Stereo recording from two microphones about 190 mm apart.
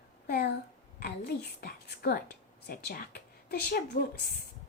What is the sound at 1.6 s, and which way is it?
A child's voice, 55° left (ahead or behind).